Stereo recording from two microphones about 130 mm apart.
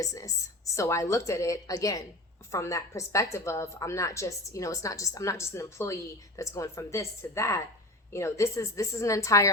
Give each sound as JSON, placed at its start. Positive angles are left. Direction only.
{"t": 0.0, "sound": "a woman's voice", "side_deg": 25}